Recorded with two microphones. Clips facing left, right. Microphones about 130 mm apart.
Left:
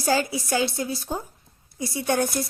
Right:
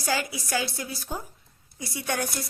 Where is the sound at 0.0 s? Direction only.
30° left (ahead or behind).